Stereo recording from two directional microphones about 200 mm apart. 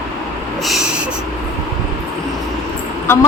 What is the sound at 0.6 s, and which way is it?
Snort, centre (ahead or behind).